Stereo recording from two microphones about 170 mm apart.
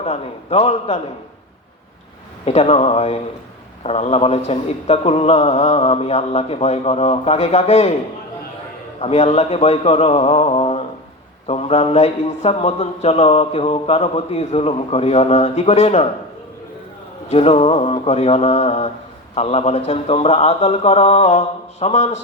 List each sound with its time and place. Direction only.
0.0 s a man's voice: 40° left (ahead or behind)
2.4 s a man's voice: 40° left (ahead or behind)
9.0 s a man's voice: 35° left (ahead or behind)
17.2 s a man's voice: 40° left (ahead or behind)